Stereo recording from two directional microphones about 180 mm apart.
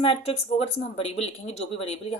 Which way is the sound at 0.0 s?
30° left (ahead or behind).